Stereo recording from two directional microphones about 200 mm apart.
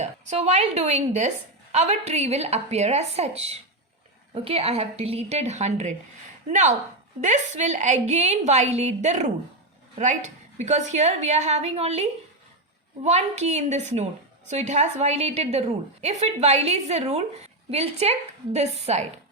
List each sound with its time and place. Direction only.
0.0 s a woman's voice: 35° right (ahead or behind)
13.1 s a woman's voice: 35° right (ahead or behind)